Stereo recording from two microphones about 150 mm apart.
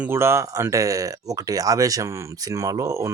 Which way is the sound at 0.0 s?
15° right (ahead or behind).